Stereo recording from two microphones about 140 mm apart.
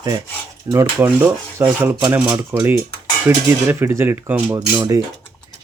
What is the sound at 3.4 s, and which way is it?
Speech, 20° right (ahead or behind).